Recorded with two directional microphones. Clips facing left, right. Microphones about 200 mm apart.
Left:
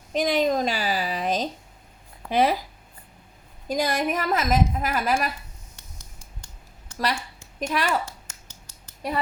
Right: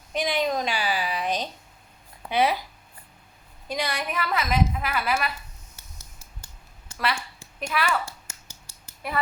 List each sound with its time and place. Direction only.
0.1 s a woman's voice: 40° left (ahead or behind)
3.7 s a woman's voice: 45° left (ahead or behind)
5.7 s a sound: 5° right (ahead or behind)
7.6 s a woman's voice: 40° left (ahead or behind)
8.0 s finger snapping: 10° right (ahead or behind)
9.0 s a sound: 35° left (ahead or behind)